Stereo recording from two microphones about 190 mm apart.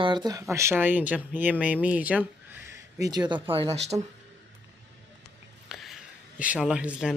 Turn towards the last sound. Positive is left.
turn(degrees=-5)  # may be behind; listen again after turning